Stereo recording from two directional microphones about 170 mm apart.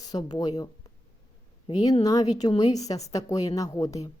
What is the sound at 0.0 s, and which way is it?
Speech, 25° left (ahead or behind).